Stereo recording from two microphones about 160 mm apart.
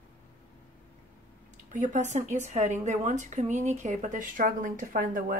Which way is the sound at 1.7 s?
50° right (ahead or behind).